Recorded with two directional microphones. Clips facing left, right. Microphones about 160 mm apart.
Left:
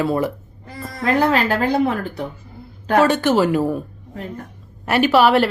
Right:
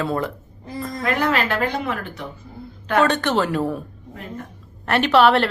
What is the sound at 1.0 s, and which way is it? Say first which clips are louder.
Speech: left 4 dB; 35° left (ahead or behind).